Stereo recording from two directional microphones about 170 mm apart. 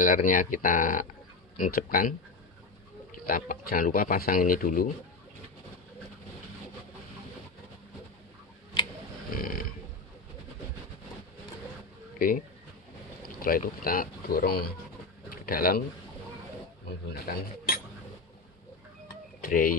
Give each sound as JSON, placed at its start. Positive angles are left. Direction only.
{"t": 0.0, "sound": "speech", "side_deg": 55}
{"t": 3.3, "sound": "speech", "side_deg": 55}
{"t": 9.3, "sound": "a sound", "side_deg": 55}
{"t": 13.4, "sound": "speech", "side_deg": 60}
{"t": 15.2, "sound": "a sound", "side_deg": 60}
{"t": 17.1, "sound": "speech", "side_deg": 55}
{"t": 19.4, "sound": "speech", "side_deg": 55}